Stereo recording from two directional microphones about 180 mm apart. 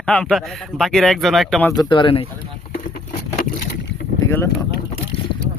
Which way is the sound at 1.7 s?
25° left (ahead or behind).